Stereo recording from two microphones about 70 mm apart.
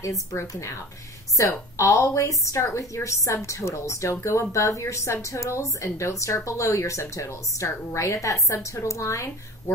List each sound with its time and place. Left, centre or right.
0.3 s speech: left